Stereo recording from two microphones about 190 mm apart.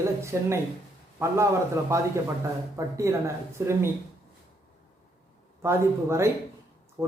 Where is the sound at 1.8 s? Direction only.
15° right (ahead or behind).